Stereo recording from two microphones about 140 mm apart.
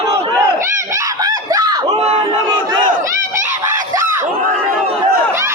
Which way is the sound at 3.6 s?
20° right (ahead or behind).